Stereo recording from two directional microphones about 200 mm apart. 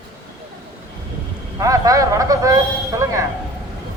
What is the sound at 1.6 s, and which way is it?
Speech, 15° right (ahead or behind).